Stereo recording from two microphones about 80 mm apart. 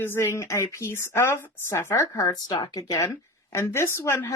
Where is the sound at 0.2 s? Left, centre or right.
Left.